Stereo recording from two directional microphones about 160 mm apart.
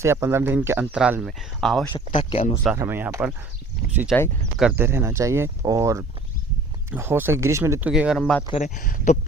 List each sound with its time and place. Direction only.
0.0 s speech: 15° right (ahead or behind); by 1.9 s centre (ahead or behind)
1.9 s speech: 35° left (ahead or behind)
2.7 s speech: 15° right (ahead or behind)
8.2 s speech: 10° left (ahead or behind)
8.6 s speech: 55° left (ahead or behind)